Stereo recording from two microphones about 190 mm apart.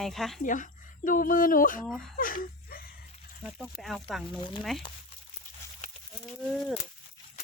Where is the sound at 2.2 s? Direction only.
45° left (ahead or behind).